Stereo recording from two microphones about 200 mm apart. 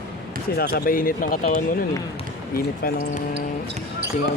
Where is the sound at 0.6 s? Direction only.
50° left (ahead or behind).